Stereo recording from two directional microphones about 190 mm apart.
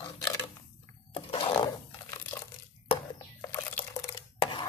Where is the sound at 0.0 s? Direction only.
15° left (ahead or behind).